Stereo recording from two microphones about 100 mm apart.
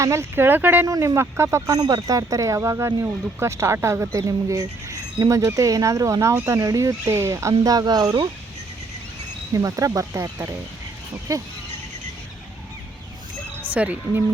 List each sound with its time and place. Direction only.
0.0 s speech: 25° right (ahead or behind)
0.9 s speech: 30° right (ahead or behind)
9.5 s speech: 30° right (ahead or behind)
13.7 s speech: 15° right (ahead or behind)